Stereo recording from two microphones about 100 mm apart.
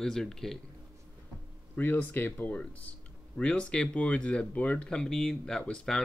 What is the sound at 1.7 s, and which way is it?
Speech, 20° left (ahead or behind).